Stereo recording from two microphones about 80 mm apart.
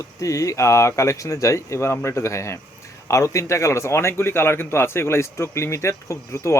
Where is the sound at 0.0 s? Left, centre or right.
Left.